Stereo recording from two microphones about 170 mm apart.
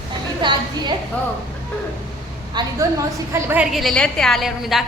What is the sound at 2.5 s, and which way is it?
Speech, 25° right (ahead or behind).